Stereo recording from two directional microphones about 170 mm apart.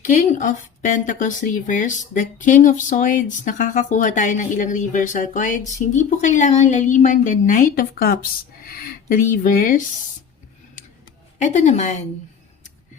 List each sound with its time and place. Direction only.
0.0 s speech: 50° left (ahead or behind)
11.3 s speech: 45° left (ahead or behind)